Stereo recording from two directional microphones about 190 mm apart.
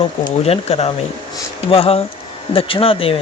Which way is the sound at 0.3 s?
30° left (ahead or behind).